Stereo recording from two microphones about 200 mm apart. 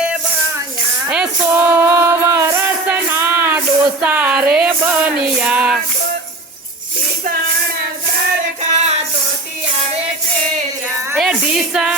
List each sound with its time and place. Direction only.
1.0 s music: 5° right (ahead or behind)
8.7 s music: 35° right (ahead or behind)
11.2 s music: centre (ahead or behind)